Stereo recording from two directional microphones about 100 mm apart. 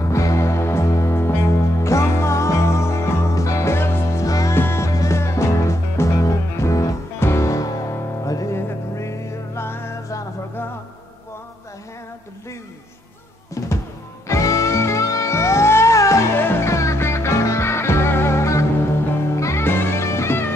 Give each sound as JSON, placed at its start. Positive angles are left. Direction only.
{"t": 0.0, "sound": "music", "side_deg": 30}
{"t": 13.6, "sound": "drum", "side_deg": 30}
{"t": 14.2, "sound": "music", "side_deg": 30}